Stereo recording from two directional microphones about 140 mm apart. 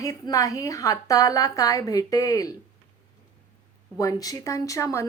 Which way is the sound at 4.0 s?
25° left (ahead or behind).